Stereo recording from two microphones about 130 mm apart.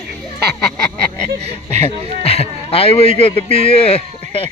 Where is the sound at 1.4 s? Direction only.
55° right (ahead or behind).